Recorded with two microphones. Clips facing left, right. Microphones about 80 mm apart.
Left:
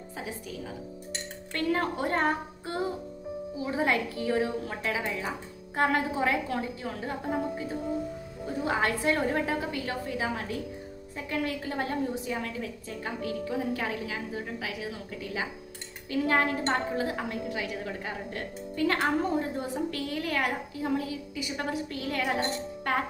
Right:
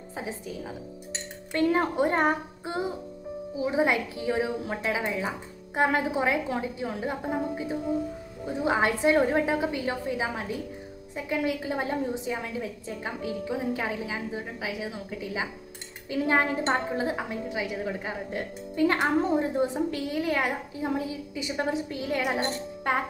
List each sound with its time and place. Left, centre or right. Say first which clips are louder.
1.5 s a woman's voice: right 4 dB; centre